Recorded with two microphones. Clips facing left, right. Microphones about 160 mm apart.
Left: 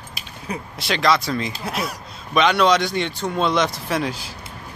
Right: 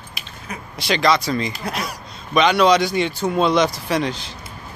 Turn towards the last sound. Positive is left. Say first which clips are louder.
# right 2 dB
turn(degrees=5)  # may be behind; listen again after turning